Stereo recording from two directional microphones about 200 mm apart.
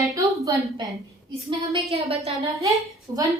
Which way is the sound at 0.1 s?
15° right (ahead or behind).